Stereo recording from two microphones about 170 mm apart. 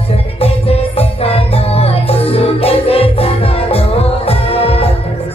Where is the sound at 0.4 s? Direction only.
35° left (ahead or behind).